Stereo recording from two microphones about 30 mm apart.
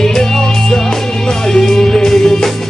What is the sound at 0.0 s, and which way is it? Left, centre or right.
Music, centre.